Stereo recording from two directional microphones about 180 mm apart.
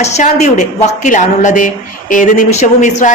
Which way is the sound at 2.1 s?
45° left (ahead or behind).